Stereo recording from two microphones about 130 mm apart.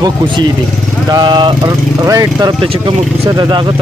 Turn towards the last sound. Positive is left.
turn(degrees=-30)  # may be behind; listen again after turning